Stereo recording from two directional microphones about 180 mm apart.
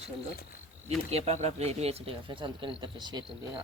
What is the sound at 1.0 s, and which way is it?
Speech, 35° right (ahead or behind).